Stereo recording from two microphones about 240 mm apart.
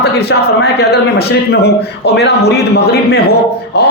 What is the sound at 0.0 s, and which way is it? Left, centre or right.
A man's voice, left.